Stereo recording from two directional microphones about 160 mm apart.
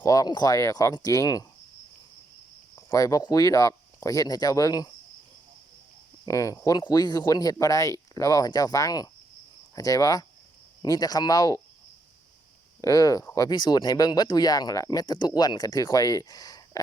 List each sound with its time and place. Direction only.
0.0 s speech: 20° left (ahead or behind)
2.9 s speech: 20° left (ahead or behind)
6.2 s speech: 20° left (ahead or behind)
12.8 s speech: 20° left (ahead or behind)